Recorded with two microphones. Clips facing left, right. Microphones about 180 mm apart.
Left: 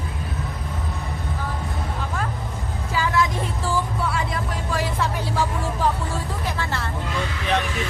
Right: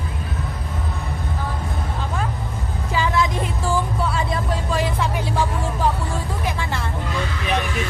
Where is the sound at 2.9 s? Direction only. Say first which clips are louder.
Right 1 dB; 20° right (ahead or behind).